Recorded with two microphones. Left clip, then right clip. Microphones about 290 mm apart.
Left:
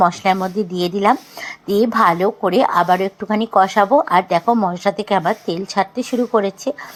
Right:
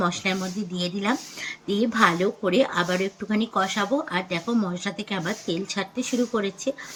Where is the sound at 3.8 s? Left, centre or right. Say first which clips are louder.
Left 12 dB; left.